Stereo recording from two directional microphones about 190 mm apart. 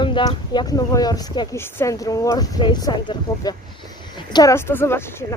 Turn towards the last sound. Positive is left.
turn(degrees=15)  # may be behind; listen again after turning